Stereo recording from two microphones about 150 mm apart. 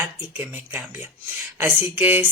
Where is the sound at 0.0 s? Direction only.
10° right (ahead or behind).